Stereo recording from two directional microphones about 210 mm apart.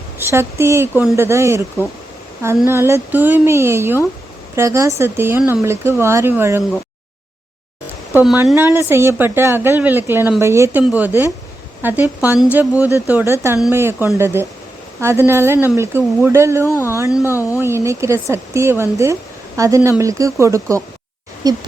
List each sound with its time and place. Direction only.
0.2 s speech: 10° right (ahead or behind)
8.1 s speech: 5° right (ahead or behind)
16.6 s speech: 10° left (ahead or behind)
17.1 s speech: centre (ahead or behind)
17.3 s speech: 15° left (ahead or behind)
17.6 s speech: 10° right (ahead or behind)